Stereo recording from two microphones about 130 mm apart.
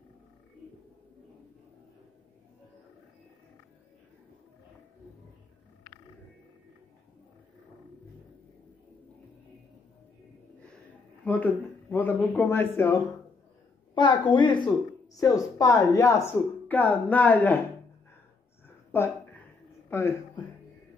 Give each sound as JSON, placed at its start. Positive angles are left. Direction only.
{"t": 11.9, "sound": "a man's voice", "side_deg": 15}
{"t": 13.9, "sound": "a woman's voice", "side_deg": 35}
{"t": 15.1, "sound": "speech", "side_deg": 25}
{"t": 18.9, "sound": "a sound", "side_deg": 20}
{"t": 19.9, "sound": "speech", "side_deg": 20}